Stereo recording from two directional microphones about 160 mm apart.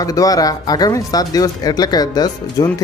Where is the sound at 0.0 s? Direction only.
20° left (ahead or behind).